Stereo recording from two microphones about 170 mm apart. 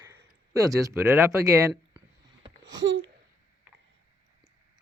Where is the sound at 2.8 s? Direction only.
90° right.